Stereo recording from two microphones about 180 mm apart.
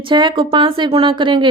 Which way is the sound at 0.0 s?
25° right (ahead or behind).